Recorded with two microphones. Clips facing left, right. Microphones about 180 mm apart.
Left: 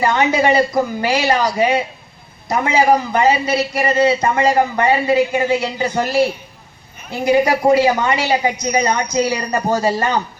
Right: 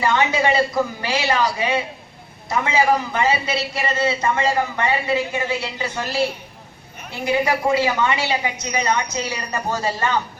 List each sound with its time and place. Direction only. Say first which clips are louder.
0.0 s a man's voice: left 4 dB; 40° left (ahead or behind)